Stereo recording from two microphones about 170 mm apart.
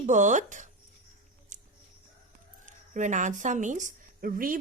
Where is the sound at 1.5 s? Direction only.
45° right (ahead or behind).